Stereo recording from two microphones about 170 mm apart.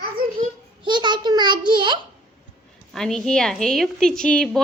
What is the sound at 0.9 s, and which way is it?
A child's voice, 25° right (ahead or behind).